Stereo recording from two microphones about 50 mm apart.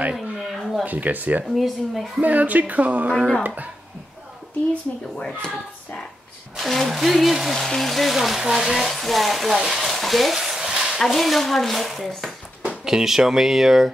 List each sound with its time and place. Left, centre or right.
0.1 s a sound: centre
0.8 s speech: right
1.5 s speech: centre
2.2 s speech: right
5.1 s speech: centre
6.5 s speech: centre
9.5 s speech: centre
9.8 s stir: centre
11.0 s speech: centre
12.8 s speech: centre